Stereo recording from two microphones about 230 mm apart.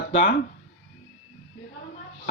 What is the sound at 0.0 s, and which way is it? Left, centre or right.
Speech, left.